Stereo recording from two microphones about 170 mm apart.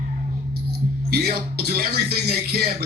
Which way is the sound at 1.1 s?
65° right (ahead or behind).